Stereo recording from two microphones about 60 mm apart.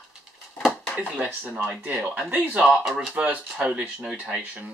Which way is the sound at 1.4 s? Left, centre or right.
Right.